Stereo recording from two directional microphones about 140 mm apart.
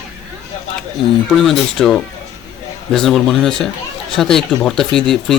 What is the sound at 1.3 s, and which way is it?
Speech, centre (ahead or behind).